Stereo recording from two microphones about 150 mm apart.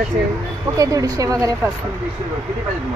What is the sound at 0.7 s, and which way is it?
Speech, 25° right (ahead or behind).